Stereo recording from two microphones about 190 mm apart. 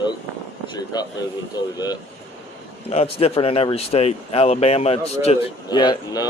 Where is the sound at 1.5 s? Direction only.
20° left (ahead or behind).